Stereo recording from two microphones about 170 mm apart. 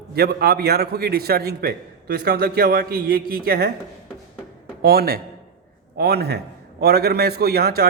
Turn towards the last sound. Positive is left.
turn(degrees=-65)  # may be behind; listen again after turning